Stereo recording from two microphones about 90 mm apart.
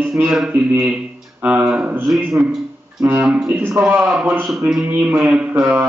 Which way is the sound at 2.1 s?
15° right (ahead or behind).